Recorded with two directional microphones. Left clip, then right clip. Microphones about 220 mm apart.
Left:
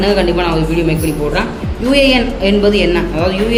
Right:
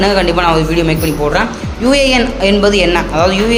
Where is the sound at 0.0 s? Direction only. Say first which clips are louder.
Right 2 dB; 15° right (ahead or behind).